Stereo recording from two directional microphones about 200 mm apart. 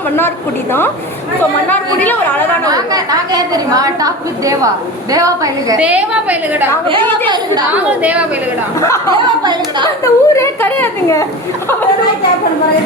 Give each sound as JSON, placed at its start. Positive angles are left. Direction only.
{"t": 1.7, "sound": "speech", "side_deg": 10}
{"t": 2.6, "sound": "a woman's voice", "side_deg": -20}
{"t": 5.8, "sound": "a woman's voice", "side_deg": -5}
{"t": 7.7, "sound": "a woman's voice", "side_deg": -5}
{"t": 8.8, "sound": "speech", "side_deg": 15}
{"t": 9.1, "sound": "speech", "side_deg": -20}
{"t": 10.0, "sound": "speech", "side_deg": 15}